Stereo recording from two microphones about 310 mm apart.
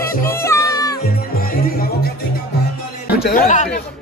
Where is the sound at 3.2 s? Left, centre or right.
Left.